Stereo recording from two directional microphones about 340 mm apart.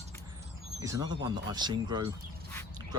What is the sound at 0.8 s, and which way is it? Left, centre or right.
Speech, centre.